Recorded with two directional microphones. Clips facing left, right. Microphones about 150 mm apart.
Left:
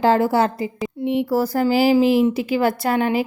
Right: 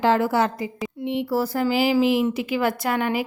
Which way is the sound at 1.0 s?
45° left (ahead or behind).